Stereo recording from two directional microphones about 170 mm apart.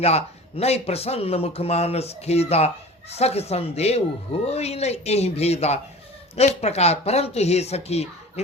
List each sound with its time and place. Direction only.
0.0 s speech: 35° left (ahead or behind)